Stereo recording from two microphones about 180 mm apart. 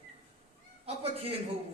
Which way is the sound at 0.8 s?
35° right (ahead or behind).